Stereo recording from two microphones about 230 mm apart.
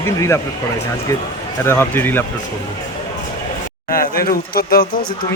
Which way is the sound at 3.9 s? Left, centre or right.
Left.